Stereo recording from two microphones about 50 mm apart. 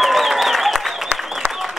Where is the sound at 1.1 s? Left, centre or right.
Centre.